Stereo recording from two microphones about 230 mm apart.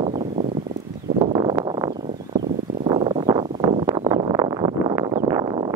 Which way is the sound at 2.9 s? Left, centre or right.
Centre.